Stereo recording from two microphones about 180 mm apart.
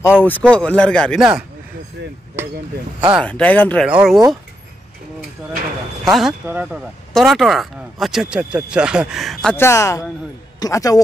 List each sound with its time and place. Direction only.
0.0 s speech: 10° left (ahead or behind)
3.2 s speech: 5° left (ahead or behind)
3.8 s speech: 5° right (ahead or behind)
6.0 s speech: centre (ahead or behind)
9.6 s a man's voice: 15° left (ahead or behind)